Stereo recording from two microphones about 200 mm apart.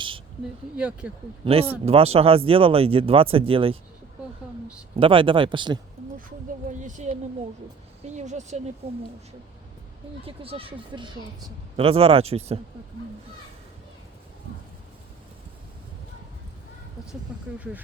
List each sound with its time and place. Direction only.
0.8 s speech: 5° right (ahead or behind)
1.8 s speech: 30° right (ahead or behind)
4.9 s speech: 25° right (ahead or behind)
6.7 s speech: 40° right (ahead or behind)
10.2 s speech: 30° right (ahead or behind)
17.3 s speech: 5° right (ahead or behind)